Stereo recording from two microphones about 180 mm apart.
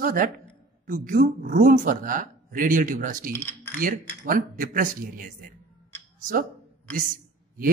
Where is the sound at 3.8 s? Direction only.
50° right (ahead or behind).